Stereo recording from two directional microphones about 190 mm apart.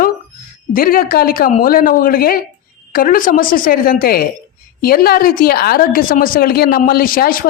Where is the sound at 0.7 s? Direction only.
50° left (ahead or behind).